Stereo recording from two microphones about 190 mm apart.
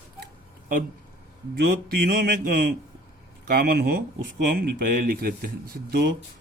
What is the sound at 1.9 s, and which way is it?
Speech, 55° right (ahead or behind).